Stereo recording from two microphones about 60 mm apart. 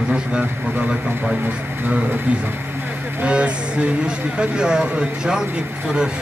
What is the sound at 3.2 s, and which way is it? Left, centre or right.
Speech, centre.